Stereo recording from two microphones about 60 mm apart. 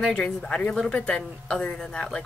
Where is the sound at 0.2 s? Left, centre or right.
Centre.